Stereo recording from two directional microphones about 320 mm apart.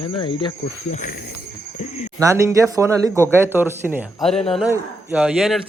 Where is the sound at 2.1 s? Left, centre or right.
Centre.